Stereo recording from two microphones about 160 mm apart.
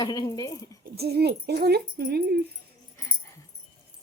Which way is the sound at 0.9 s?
85° right.